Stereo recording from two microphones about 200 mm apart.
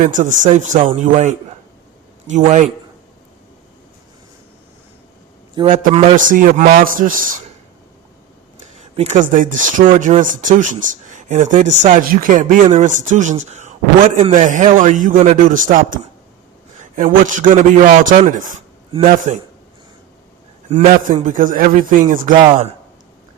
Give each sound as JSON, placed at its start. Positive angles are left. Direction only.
{"t": 0.0, "sound": "speech", "side_deg": -40}
{"t": 5.7, "sound": "a man's voice", "side_deg": -40}
{"t": 9.0, "sound": "a man's voice", "side_deg": -40}
{"t": 20.7, "sound": "a man's voice", "side_deg": -40}